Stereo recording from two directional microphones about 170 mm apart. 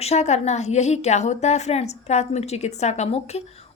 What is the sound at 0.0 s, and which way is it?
Speech, 40° left (ahead or behind).